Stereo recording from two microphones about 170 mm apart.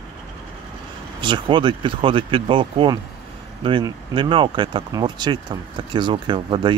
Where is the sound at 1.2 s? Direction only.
30° right (ahead or behind).